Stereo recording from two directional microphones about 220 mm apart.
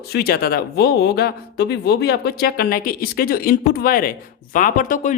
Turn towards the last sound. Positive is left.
turn(degrees=35)  # may be behind; listen again after turning